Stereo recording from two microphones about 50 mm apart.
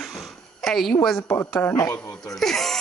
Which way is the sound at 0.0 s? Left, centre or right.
Centre.